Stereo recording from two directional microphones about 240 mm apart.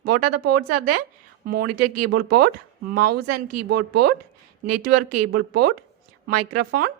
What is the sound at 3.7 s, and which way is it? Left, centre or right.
A woman's voice, right.